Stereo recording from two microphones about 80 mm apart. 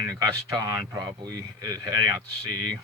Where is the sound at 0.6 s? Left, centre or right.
Right.